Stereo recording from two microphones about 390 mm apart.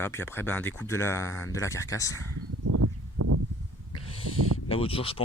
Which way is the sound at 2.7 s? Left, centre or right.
Right.